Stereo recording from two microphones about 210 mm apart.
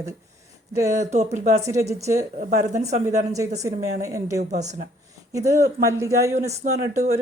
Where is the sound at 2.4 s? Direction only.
35° right (ahead or behind).